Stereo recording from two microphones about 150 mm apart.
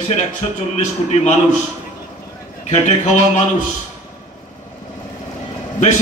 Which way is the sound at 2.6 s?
50° left (ahead or behind).